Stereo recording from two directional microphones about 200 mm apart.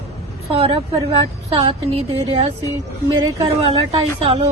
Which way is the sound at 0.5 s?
30° right (ahead or behind).